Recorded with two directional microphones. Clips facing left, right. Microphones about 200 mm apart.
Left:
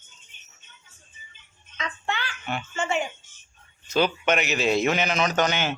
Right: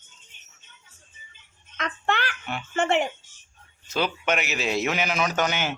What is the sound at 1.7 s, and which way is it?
A child's voice, 60° right (ahead or behind).